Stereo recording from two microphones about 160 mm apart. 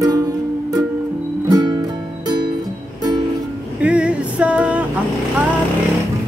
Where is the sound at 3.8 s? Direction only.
5° right (ahead or behind).